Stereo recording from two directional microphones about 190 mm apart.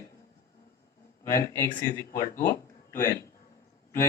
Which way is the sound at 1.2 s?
15° left (ahead or behind).